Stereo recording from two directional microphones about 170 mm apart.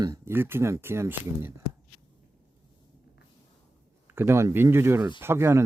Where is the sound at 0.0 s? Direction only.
15° right (ahead or behind).